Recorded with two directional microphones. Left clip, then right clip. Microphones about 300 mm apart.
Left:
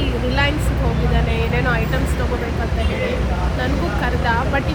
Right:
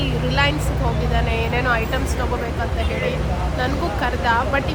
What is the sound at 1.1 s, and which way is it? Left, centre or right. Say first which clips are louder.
Speech: right 1 dB; centre.